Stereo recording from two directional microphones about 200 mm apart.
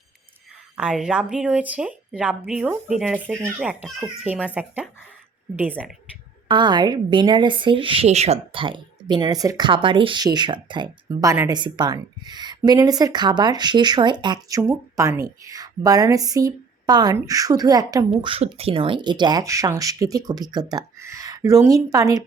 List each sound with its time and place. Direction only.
0.8 s speech: 5° right (ahead or behind)
6.5 s speech: 20° right (ahead or behind)